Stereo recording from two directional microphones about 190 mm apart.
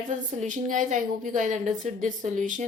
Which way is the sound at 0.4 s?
40° right (ahead or behind).